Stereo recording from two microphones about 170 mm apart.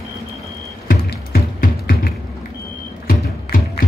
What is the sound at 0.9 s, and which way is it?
Music, 60° left (ahead or behind).